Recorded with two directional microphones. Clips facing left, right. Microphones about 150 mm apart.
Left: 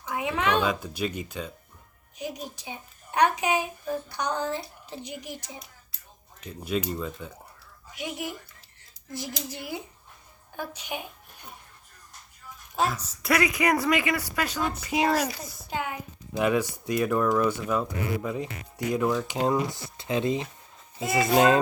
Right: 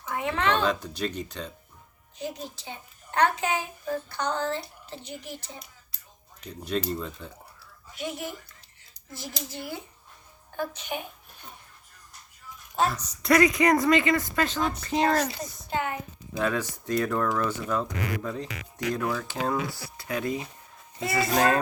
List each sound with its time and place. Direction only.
0.0 s a woman's voice: 10° left (ahead or behind)
6.4 s a woman's voice: 5° left (ahead or behind)
9.5 s a woman's voice: 15° left (ahead or behind)
12.7 s a woman's voice: 5° left (ahead or behind)
18.4 s speech: 90° right
18.9 s speech: 10° left (ahead or behind)